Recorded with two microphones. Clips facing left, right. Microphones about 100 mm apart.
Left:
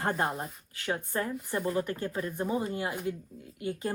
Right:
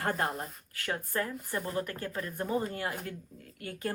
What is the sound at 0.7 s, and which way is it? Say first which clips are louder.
Speech: left 2 dB; 20° left (ahead or behind).